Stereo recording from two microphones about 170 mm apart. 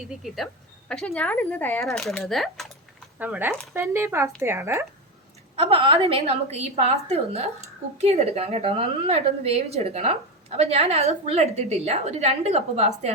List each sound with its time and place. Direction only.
0.2 s speech: 5° right (ahead or behind)
3.2 s a woman's voice: 10° right (ahead or behind)
3.5 s speech: 5° left (ahead or behind)
3.8 s a woman's voice: 15° right (ahead or behind)
5.5 s a woman's voice: 30° right (ahead or behind)